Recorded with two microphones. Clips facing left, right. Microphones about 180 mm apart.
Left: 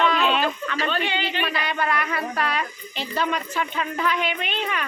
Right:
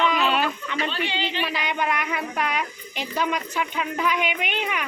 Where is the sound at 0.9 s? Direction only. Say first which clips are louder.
Left 4 dB; 55° left (ahead or behind).